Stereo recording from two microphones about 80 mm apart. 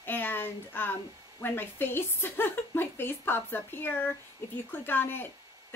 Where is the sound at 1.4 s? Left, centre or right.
Left.